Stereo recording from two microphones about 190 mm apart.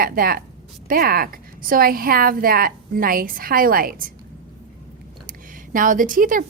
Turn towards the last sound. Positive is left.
turn(degrees=-45)  # may be behind; listen again after turning